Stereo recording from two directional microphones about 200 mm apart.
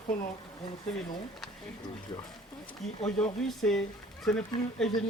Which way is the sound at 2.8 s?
5° left (ahead or behind).